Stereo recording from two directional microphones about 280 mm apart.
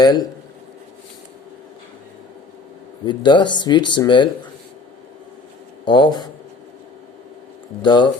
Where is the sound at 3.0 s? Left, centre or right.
Centre.